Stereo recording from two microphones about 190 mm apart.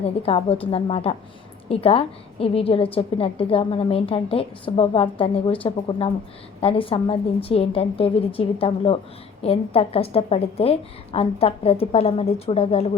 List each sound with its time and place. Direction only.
0.2 s a woman's voice: 30° left (ahead or behind)